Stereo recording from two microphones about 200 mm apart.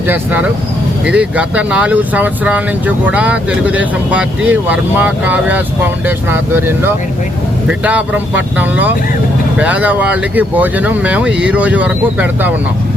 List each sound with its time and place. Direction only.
0.1 s speech: 10° right (ahead or behind)